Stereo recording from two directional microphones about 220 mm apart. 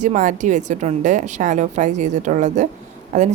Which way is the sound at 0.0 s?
35° right (ahead or behind).